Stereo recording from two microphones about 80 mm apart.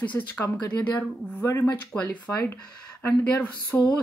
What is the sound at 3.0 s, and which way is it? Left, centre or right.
Speech, left.